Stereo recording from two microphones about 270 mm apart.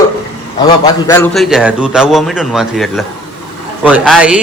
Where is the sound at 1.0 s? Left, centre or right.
Centre.